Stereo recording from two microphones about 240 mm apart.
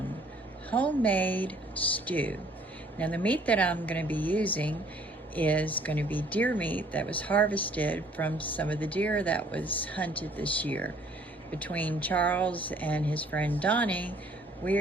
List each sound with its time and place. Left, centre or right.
0.7 s speech: centre